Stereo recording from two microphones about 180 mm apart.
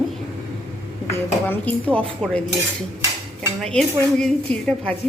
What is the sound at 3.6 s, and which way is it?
A woman's voice, 5° left (ahead or behind).